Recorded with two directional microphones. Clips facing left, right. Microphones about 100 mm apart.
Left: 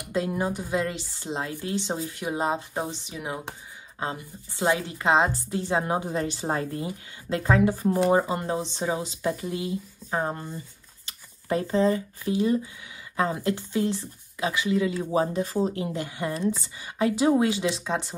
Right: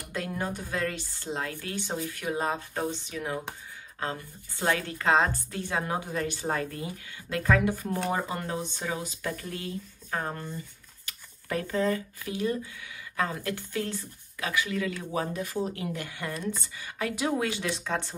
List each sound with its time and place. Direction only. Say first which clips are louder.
0.0 s speech: left 6 dB; 20° left (ahead or behind)